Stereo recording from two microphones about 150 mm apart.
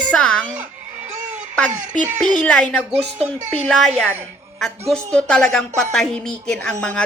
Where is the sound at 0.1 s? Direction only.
10° left (ahead or behind).